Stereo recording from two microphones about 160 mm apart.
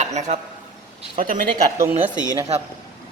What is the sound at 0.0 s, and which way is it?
Speech, 45° right (ahead or behind).